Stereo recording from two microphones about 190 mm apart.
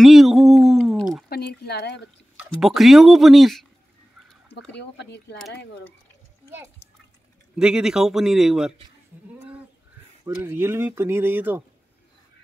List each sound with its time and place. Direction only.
0.0 s a sound: centre (ahead or behind)
1.3 s a sound: 55° left (ahead or behind)
2.5 s a man's voice: centre (ahead or behind)
4.6 s speech: 65° left (ahead or behind)
7.5 s a man's voice: 5° right (ahead or behind)
10.2 s speech: 10° right (ahead or behind)